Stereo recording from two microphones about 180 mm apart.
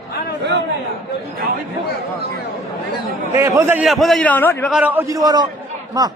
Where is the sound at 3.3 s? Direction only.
15° right (ahead or behind).